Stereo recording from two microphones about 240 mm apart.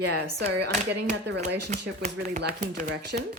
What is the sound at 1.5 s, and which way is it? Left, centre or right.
Speech, right.